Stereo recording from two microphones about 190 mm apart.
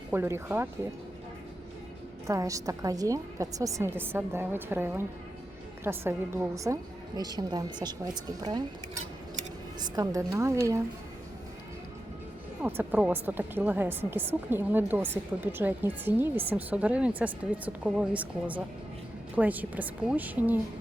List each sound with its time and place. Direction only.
0.1 s a woman's voice: 10° right (ahead or behind)
2.2 s a woman's voice: 15° right (ahead or behind)
9.9 s a woman's voice: 20° right (ahead or behind)
12.6 s a woman's voice: 10° right (ahead or behind)